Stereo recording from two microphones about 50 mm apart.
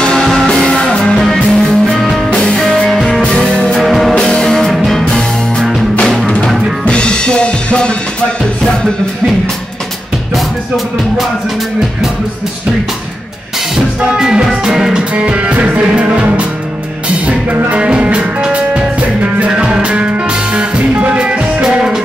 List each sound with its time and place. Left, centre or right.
0.0 s music: centre
1.2 s music: centre
2.3 s music: centre
3.8 s music: centre
4.1 s music: left
4.5 s music: centre
5.0 s music: centre
14.0 s music: centre
15.1 s music: right
17.6 s music: right